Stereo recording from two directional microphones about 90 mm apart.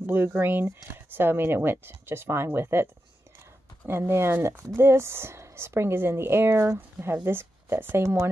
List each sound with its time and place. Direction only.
0.0 s speech: 25° right (ahead or behind)